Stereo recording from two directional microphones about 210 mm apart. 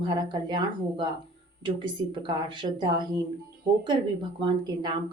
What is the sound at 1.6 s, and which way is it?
A woman's voice, 25° right (ahead or behind).